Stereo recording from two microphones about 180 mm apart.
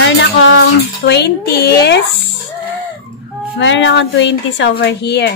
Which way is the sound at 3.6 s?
90° left.